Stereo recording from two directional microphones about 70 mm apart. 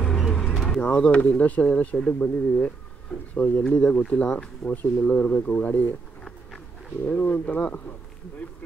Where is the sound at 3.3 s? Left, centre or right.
Left.